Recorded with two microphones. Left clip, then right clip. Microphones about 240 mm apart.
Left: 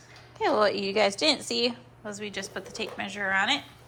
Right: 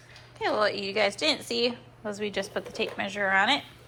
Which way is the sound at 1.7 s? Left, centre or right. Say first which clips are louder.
Right 3 dB; centre.